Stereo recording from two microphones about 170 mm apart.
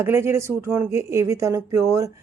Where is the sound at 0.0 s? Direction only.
15° right (ahead or behind).